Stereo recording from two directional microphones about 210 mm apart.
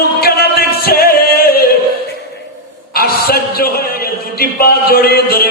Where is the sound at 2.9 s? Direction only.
45° left (ahead or behind).